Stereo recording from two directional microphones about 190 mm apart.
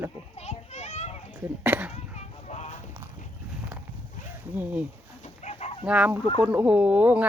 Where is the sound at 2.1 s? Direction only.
35° left (ahead or behind).